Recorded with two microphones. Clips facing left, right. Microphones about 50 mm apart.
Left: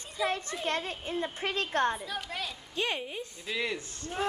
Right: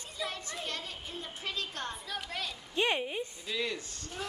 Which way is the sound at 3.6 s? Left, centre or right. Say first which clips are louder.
Left 2 dB; centre.